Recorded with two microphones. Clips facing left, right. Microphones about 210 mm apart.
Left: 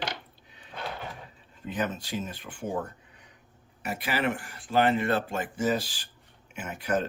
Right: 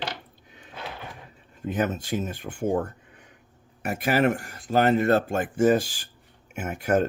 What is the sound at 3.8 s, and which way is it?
Speech, 50° right (ahead or behind).